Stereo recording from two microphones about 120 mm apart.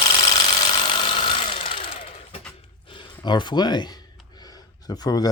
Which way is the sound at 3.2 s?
40° left (ahead or behind).